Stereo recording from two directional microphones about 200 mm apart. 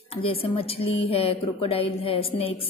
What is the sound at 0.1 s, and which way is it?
A woman's voice, 30° left (ahead or behind).